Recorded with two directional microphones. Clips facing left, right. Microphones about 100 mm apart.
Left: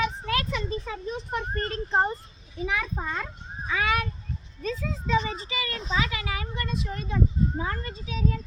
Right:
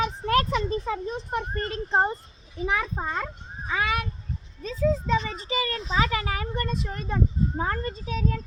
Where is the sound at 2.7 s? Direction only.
35° right (ahead or behind).